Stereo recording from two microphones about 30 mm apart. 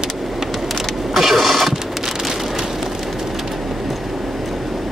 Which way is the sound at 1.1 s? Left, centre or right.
Centre.